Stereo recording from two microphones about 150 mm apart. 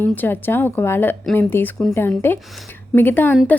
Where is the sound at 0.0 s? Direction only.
15° left (ahead or behind).